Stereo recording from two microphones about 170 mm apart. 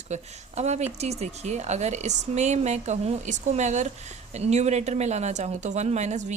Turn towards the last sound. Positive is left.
turn(degrees=-45)  # may be behind; listen again after turning